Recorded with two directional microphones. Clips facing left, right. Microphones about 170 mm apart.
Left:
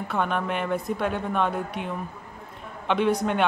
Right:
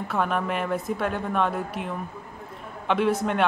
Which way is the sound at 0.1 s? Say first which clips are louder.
Right 1 dB; centre (ahead or behind).